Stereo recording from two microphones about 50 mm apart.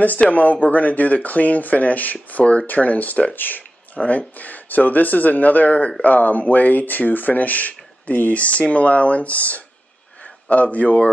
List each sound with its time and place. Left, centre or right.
0.2 s speech: left